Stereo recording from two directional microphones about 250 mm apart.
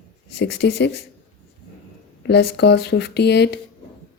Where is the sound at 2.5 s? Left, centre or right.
Left.